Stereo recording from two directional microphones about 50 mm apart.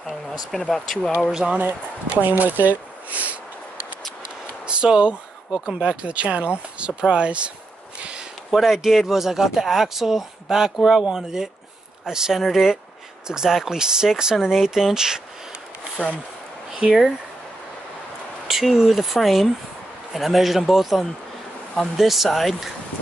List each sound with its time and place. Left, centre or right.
0.1 s speech: centre
1.3 s speech: centre
2.1 s speech: right
4.6 s a sound: centre
5.7 s speech: right
8.5 s speech: centre
16.7 s speech: centre
18.5 s speech: centre